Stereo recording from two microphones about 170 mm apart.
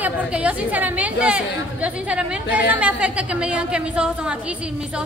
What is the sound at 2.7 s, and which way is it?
A man's voice, 10° right (ahead or behind).